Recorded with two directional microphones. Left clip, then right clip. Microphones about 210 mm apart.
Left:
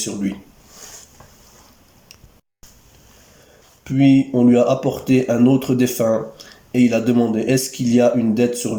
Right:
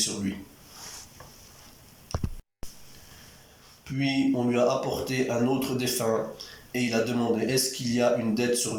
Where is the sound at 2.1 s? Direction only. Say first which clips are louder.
Right 11 dB; 45° left (ahead or behind).